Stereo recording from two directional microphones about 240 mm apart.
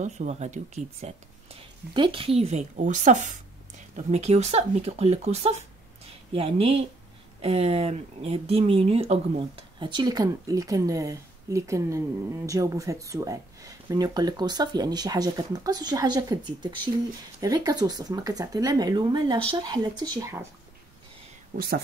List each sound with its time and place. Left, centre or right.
0.0 s speech: right
21.5 s speech: right